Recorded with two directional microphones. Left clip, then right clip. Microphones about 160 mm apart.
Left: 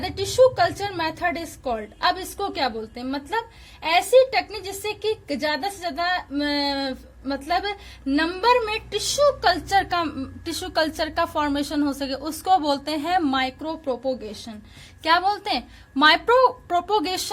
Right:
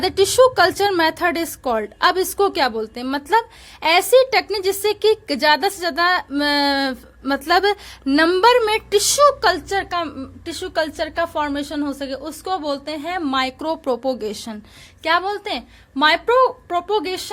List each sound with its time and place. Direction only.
0.0 s a woman's voice: 50° right (ahead or behind)
9.6 s a woman's voice: 10° right (ahead or behind)
13.2 s a woman's voice: 20° right (ahead or behind)
13.6 s a woman's voice: 45° right (ahead or behind)
15.0 s a woman's voice: 10° right (ahead or behind)